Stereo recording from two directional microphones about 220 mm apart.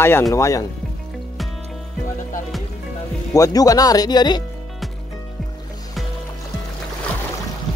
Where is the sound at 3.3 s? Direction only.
15° left (ahead or behind).